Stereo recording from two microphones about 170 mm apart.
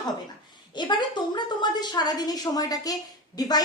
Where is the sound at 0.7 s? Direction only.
25° left (ahead or behind).